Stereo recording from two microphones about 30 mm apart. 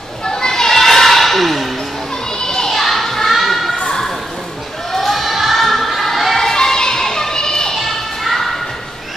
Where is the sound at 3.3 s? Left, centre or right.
Centre.